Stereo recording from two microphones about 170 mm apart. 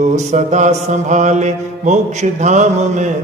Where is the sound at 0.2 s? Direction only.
45° right (ahead or behind).